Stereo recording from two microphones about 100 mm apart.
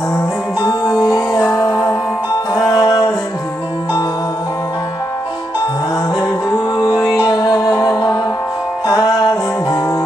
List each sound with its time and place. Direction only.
0.6 s music: 35° left (ahead or behind)
7.2 s music: 45° left (ahead or behind)